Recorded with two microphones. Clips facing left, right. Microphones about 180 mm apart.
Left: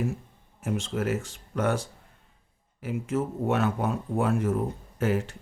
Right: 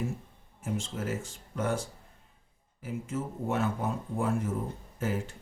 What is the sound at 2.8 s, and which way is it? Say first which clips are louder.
Speech: left 6 dB; 70° left (ahead or behind).